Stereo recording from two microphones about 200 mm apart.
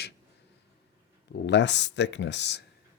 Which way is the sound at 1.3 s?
60° left (ahead or behind).